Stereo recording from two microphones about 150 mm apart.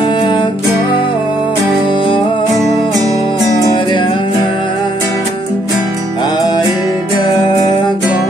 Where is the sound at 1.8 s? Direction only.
35° left (ahead or behind).